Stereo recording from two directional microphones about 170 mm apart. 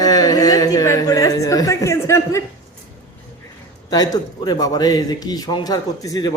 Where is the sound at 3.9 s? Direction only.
25° left (ahead or behind).